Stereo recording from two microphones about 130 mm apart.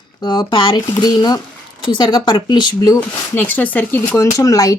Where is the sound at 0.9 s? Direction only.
25° left (ahead or behind).